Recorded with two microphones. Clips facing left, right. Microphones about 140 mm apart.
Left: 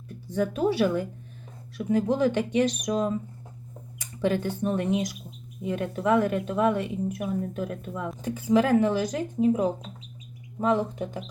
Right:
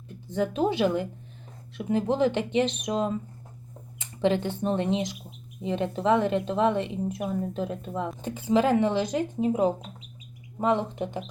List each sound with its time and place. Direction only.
0.3 s a woman's voice: 20° right (ahead or behind)
4.2 s a woman's voice: 20° right (ahead or behind)